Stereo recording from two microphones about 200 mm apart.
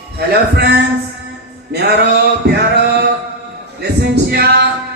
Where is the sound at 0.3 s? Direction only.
55° right (ahead or behind).